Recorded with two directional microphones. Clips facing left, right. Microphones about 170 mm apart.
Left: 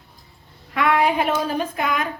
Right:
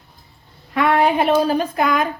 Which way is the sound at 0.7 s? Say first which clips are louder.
Right 3 dB; 30° right (ahead or behind).